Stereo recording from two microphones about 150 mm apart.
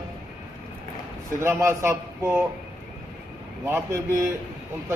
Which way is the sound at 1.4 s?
15° right (ahead or behind).